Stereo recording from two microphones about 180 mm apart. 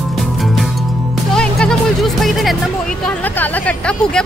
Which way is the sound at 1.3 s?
5° left (ahead or behind).